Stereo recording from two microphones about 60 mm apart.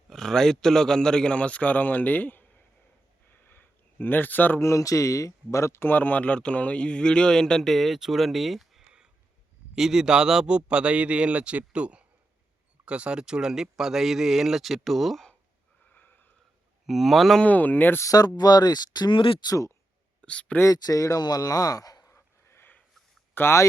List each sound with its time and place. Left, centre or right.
0.1 s speech: centre; by 2.5 s left
3.4 s a sound: left
4.6 s speech: left
5.9 s speech: left; by 15.3 s centre
15.9 s wheeze: left
16.8 s speech: centre
17.4 s speech: left
18.0 s a man's voice: left
20.2 s speech: centre
20.7 s a man's voice: left
22.1 s dog: left
23.3 s speech: left